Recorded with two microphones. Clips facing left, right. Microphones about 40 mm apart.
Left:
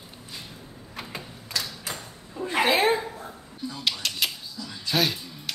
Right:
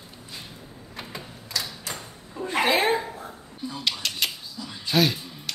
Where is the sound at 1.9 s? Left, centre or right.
Centre.